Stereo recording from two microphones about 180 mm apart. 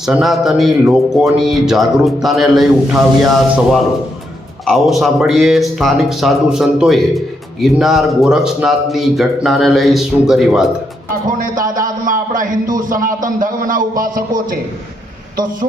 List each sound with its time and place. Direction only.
0.0 s a man's voice: centre (ahead or behind)
11.3 s a man's voice: 50° right (ahead or behind)